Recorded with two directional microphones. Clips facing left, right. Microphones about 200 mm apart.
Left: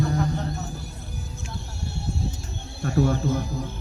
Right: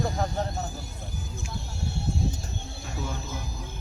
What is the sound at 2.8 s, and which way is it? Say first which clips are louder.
Speech: left 14 dB; 65° left (ahead or behind).